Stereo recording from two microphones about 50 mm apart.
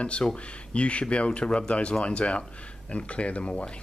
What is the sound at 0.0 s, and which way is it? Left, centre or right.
Speech, left.